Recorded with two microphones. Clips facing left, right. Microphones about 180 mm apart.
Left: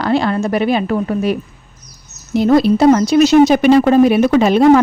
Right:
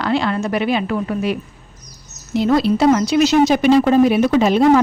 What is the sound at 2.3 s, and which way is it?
A woman's voice, 45° left (ahead or behind).